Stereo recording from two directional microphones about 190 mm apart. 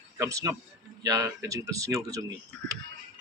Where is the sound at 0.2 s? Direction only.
15° right (ahead or behind).